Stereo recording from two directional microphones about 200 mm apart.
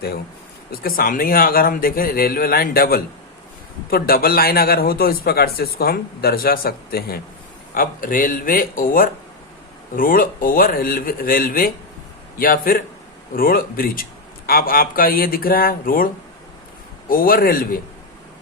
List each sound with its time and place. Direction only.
0.7 s a man's voice: 45° left (ahead or behind)
17.1 s a man's voice: 45° left (ahead or behind)